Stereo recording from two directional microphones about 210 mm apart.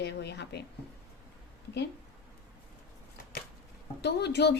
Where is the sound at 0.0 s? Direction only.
55° left (ahead or behind).